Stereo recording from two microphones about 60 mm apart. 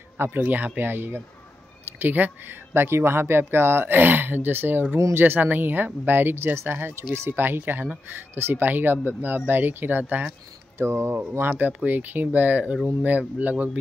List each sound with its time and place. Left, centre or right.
0.2 s speech: right
8.4 s speech: right
10.8 s speech: right